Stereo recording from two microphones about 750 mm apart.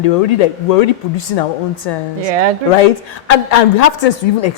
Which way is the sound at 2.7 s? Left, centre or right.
Left.